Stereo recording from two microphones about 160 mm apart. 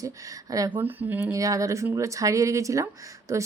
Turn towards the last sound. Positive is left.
turn(degrees=-20)  # may be behind; listen again after turning